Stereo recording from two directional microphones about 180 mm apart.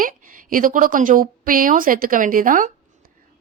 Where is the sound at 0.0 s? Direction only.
50° right (ahead or behind).